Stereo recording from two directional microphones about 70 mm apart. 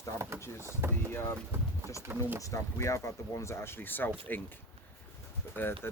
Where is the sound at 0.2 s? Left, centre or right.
Right.